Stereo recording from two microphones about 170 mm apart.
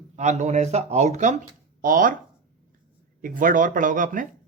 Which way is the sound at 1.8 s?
55° right (ahead or behind).